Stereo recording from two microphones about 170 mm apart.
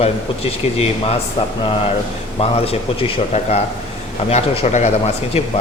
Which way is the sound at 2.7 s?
35° left (ahead or behind).